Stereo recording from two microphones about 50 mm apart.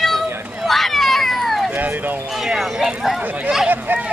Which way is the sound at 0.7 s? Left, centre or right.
Centre.